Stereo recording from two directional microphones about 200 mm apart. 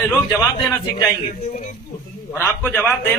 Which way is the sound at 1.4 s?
35° left (ahead or behind).